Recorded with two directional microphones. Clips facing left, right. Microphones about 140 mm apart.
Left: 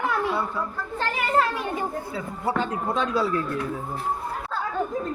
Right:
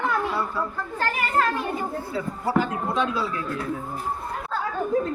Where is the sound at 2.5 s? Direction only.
25° left (ahead or behind).